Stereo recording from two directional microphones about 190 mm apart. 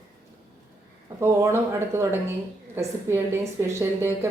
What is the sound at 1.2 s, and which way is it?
A woman's voice, 15° right (ahead or behind).